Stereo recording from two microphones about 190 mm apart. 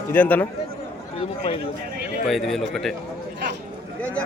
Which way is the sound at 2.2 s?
Centre (ahead or behind).